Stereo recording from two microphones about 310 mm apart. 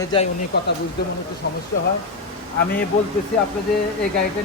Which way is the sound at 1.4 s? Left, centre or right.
Left.